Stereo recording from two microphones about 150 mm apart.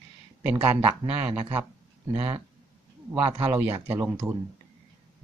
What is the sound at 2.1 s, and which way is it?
Speech, 35° right (ahead or behind).